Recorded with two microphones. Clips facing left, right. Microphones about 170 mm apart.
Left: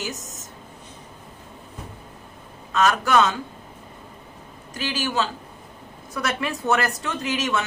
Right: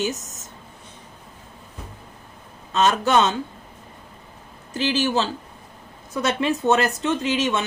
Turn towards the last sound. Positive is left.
turn(degrees=-20)  # may be behind; listen again after turning